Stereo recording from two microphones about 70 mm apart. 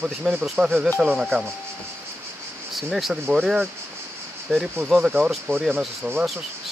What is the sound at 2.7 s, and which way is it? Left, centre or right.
Speech, centre.